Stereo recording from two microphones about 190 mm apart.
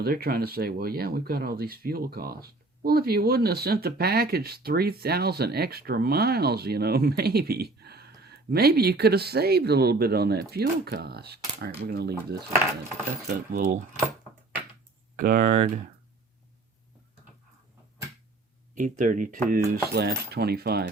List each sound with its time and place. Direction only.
0.0 s speech: 55° right (ahead or behind)
13.2 s speech: 55° right (ahead or behind)
15.1 s speech: 45° right (ahead or behind)
18.7 s speech: 40° right (ahead or behind)
19.7 s speech: 55° right (ahead or behind)